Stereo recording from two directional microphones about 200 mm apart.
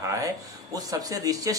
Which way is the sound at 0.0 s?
15° right (ahead or behind).